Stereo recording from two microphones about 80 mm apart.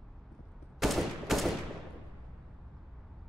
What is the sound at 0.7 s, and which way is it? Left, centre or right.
Fusillade, centre.